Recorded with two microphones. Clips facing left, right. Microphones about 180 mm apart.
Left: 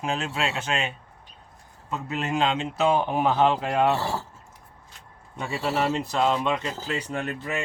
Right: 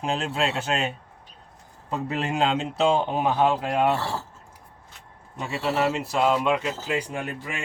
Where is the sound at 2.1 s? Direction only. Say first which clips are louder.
Even; 35° right (ahead or behind).